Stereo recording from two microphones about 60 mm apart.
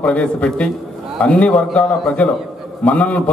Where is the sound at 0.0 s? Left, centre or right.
Centre.